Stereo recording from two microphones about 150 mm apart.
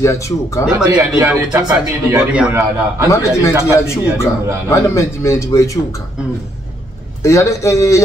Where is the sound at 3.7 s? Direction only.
20° left (ahead or behind).